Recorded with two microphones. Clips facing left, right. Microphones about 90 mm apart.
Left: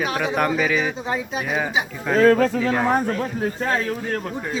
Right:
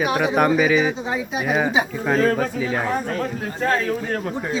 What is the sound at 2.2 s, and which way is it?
Speech, 90° left.